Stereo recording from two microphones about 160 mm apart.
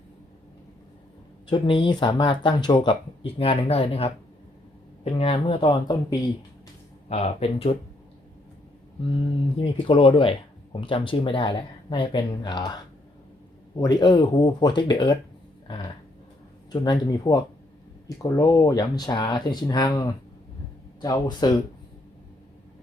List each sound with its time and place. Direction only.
1.5 s speech: 30° left (ahead or behind)
5.1 s speech: 35° left (ahead or behind)
7.1 s speech: 40° left (ahead or behind)
9.6 s speech: 35° left (ahead or behind)
13.7 s speech: 25° left (ahead or behind)
16.7 s speech: 25° left (ahead or behind)